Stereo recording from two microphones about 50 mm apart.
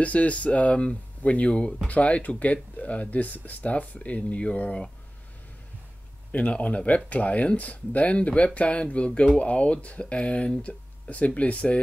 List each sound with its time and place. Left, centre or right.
0.0 s speech: left
6.3 s speech: left